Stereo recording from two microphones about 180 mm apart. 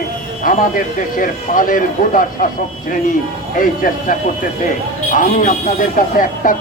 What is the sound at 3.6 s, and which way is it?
A man's voice, 50° left (ahead or behind).